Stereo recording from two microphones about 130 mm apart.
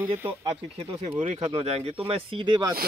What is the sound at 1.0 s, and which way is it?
Speech, 50° right (ahead or behind).